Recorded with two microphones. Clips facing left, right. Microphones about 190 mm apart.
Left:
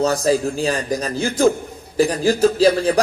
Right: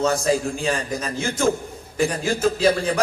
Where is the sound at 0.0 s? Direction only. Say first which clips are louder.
Left 3 dB; 35° left (ahead or behind).